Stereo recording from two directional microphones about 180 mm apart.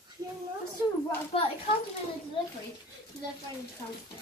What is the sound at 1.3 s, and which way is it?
Speech, 30° left (ahead or behind).